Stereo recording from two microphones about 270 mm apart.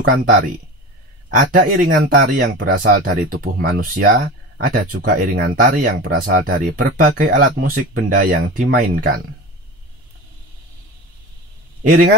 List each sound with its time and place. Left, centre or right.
0.0 s speech: right